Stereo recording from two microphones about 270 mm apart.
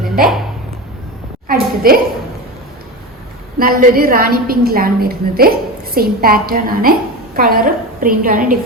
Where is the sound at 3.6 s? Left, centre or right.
Right.